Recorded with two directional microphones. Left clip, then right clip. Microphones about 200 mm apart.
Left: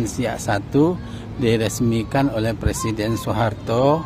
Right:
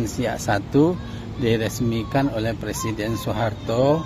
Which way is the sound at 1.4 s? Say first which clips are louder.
Left 3 dB; 20° left (ahead or behind).